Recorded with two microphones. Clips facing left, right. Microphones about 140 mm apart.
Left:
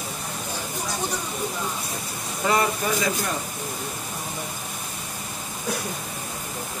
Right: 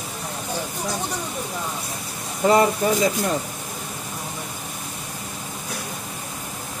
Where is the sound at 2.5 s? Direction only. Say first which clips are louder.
Right 5 dB; 30° right (ahead or behind).